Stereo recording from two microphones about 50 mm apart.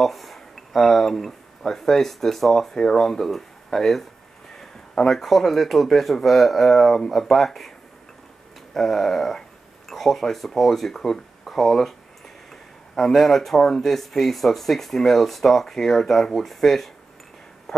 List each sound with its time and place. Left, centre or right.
0.0 s a sound: centre
1.6 s speech: centre
8.7 s speech: centre
12.9 s speech: centre